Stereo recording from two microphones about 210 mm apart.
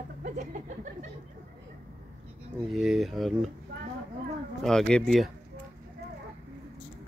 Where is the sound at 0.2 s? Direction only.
35° right (ahead or behind).